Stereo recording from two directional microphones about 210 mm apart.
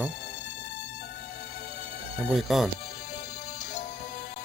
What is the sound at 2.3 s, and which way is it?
Speech, centre (ahead or behind).